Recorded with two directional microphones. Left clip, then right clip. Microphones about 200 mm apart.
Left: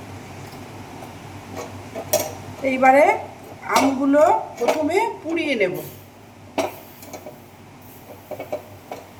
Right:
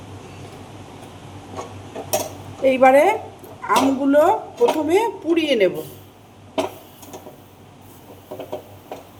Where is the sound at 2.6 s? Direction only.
35° right (ahead or behind).